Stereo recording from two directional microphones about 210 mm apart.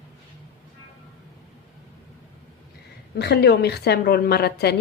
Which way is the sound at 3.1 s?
50° left (ahead or behind).